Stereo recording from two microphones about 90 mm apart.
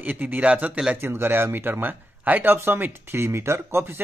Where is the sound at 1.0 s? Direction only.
25° right (ahead or behind).